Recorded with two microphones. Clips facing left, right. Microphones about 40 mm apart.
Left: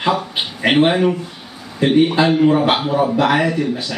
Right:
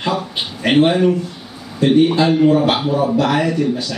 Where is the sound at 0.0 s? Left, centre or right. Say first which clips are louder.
Left 2 dB; centre.